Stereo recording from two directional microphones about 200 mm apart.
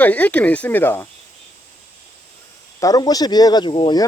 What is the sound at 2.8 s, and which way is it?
Speech, 20° left (ahead or behind).